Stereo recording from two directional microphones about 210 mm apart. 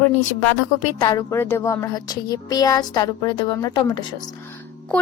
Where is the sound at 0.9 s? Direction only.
20° left (ahead or behind).